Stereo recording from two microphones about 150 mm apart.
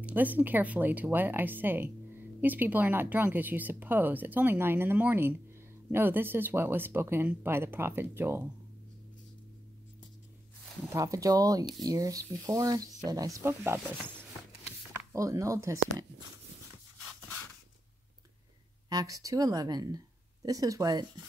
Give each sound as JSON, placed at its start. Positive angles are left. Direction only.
{"t": 0.0, "sound": "speech", "side_deg": -10}
{"t": 10.9, "sound": "speech", "side_deg": -20}
{"t": 14.9, "sound": "speech", "side_deg": -20}
{"t": 18.9, "sound": "speech", "side_deg": -25}